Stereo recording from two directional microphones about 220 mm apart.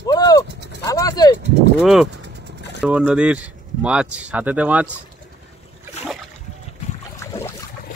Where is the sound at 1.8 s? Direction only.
Centre (ahead or behind).